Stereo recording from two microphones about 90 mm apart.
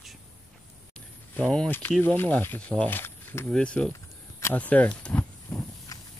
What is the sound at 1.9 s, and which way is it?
Speech, 15° left (ahead or behind).